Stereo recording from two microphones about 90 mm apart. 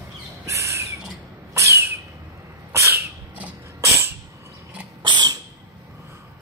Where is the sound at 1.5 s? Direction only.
35° right (ahead or behind).